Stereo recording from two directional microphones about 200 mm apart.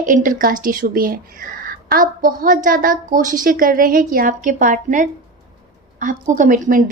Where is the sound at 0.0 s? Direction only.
40° right (ahead or behind).